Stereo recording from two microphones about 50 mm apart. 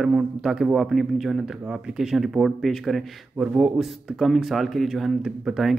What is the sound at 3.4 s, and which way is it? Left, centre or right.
Speech, right.